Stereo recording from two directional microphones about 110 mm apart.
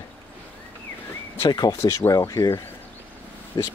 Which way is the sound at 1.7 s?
25° left (ahead or behind).